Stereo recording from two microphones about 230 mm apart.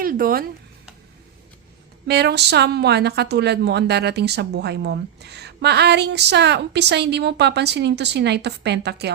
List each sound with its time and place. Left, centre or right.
0.0 s speech: right
2.0 s a woman's voice: right